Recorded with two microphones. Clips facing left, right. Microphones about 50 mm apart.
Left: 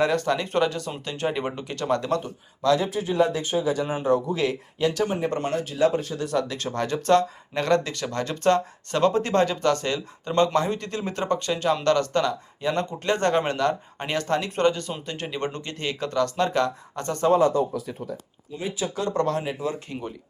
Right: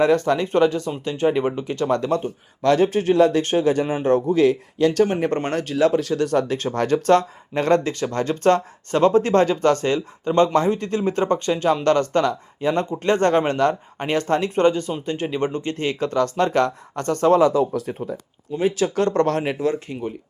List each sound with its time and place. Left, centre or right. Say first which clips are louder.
0.0 s speech: right 5 dB; right
1.7 s speech: right 2 dB; right
2.6 s speech: right 5 dB; right
4.0 s speech: right 7 dB; right
6.2 s speech: right 5 dB; right
7.5 s speech: right 4 dB; right
15.7 s speech: right 5 dB; right
17.3 s speech: right 3 dB; right
18.6 s speech: right 8 dB; right
19.4 s speech: right 6 dB; right